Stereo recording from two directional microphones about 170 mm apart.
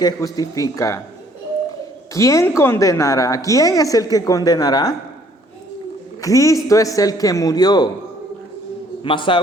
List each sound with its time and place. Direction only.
0.0 s a woman's voice: 20° left (ahead or behind)
2.1 s a woman's voice: 20° left (ahead or behind)
6.2 s a woman's voice: 20° left (ahead or behind)
9.0 s a woman's voice: 30° left (ahead or behind)